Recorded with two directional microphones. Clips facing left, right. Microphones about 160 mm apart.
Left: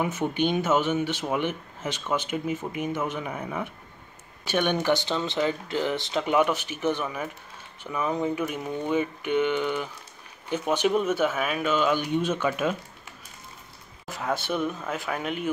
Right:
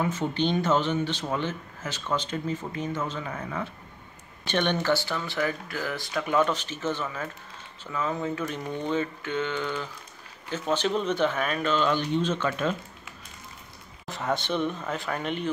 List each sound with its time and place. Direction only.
0.0 s speech: 15° left (ahead or behind)
14.0 s speech: 5° left (ahead or behind)